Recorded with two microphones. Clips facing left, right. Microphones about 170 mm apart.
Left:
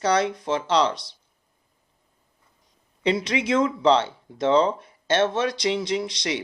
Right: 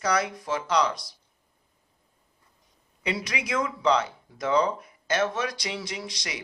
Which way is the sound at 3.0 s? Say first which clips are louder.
Left 8 dB; 25° left (ahead or behind).